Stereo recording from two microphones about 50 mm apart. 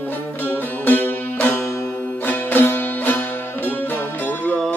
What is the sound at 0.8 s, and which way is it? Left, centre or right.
Music, left.